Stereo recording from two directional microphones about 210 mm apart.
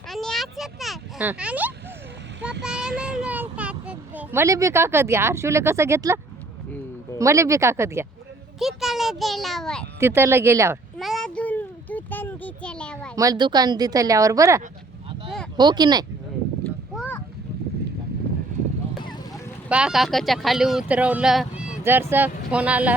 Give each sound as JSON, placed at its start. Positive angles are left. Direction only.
{"t": 0.1, "sound": "a sound", "side_deg": 0}
{"t": 2.6, "sound": "child singing", "side_deg": -5}
{"t": 3.0, "sound": "speech", "side_deg": -5}
{"t": 7.2, "sound": "speech", "side_deg": -15}
{"t": 8.5, "sound": "a child's voice", "side_deg": 0}
{"t": 10.0, "sound": "speech", "side_deg": -10}
{"t": 10.9, "sound": "a sound", "side_deg": 0}
{"t": 13.1, "sound": "speech", "side_deg": -20}
{"t": 19.6, "sound": "speech", "side_deg": -5}